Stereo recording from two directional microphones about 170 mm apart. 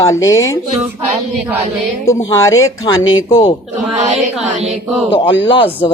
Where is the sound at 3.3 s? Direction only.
30° left (ahead or behind).